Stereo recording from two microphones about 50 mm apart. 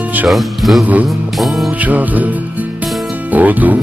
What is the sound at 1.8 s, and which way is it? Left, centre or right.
Music, right.